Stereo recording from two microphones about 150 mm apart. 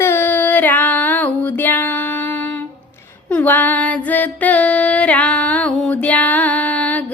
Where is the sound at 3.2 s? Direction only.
10° left (ahead or behind).